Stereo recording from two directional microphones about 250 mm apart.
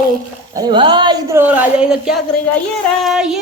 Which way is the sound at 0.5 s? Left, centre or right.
Centre.